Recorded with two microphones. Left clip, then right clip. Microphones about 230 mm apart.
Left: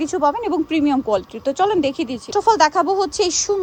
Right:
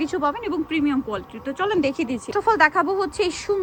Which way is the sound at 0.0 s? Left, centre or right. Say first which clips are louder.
Left 5 dB; centre.